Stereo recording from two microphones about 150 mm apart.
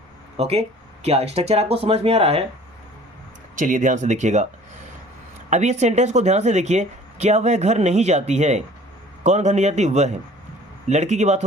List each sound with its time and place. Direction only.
0.3 s speech: 45° right (ahead or behind)
3.5 s speech: 60° right (ahead or behind)
5.5 s speech: 50° right (ahead or behind)